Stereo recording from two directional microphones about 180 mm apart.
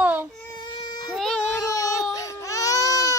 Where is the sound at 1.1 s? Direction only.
5° left (ahead or behind).